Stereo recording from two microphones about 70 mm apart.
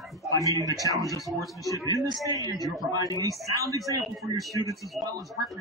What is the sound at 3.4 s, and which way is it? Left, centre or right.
Speech, right.